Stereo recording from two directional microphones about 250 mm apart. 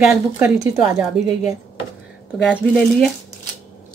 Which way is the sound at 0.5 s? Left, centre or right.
Centre.